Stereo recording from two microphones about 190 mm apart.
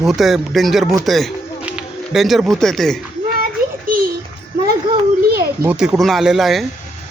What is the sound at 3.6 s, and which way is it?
Child singing, 50° right (ahead or behind).